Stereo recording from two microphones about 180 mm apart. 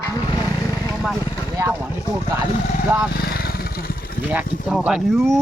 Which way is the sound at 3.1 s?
60° left (ahead or behind).